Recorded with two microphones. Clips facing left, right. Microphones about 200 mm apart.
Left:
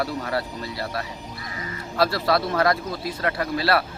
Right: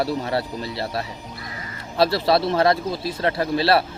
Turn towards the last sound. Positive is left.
turn(degrees=-30)  # may be behind; listen again after turning